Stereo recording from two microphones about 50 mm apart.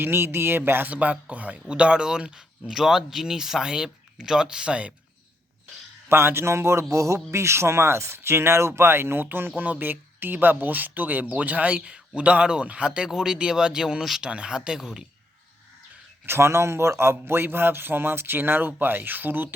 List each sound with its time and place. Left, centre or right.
0.0 s a man's voice: right
0.9 s speech: right
6.1 s a man's voice: right
9.6 s speech: right
13.1 s speech: centre
14.2 s speech: centre
16.2 s a man's voice: right